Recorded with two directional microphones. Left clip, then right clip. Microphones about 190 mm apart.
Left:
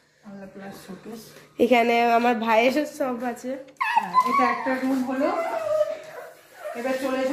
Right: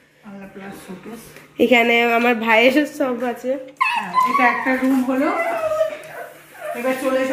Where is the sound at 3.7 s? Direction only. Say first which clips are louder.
Right 1 dB; 35° left (ahead or behind).